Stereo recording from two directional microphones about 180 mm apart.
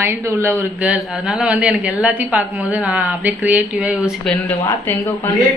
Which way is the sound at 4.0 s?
15° left (ahead or behind).